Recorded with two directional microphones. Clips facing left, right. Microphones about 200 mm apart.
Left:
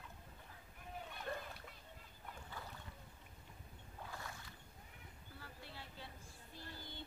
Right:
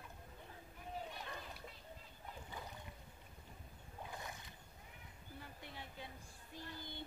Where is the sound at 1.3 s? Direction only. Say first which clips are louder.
Left 6 dB; 45° left (ahead or behind).